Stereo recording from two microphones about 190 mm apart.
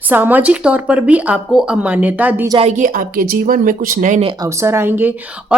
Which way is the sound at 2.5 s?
35° right (ahead or behind).